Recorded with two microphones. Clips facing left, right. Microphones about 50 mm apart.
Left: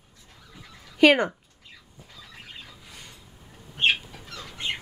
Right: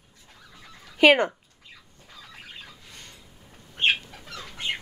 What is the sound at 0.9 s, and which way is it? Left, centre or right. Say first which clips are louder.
Speech: even; centre.